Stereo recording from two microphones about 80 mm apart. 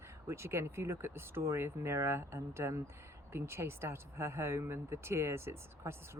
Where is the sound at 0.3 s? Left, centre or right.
Right.